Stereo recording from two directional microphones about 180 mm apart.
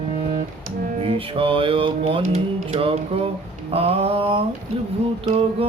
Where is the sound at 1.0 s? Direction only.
30° right (ahead or behind).